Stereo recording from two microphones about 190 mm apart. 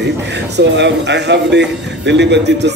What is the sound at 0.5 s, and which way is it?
A man's voice, 65° right (ahead or behind).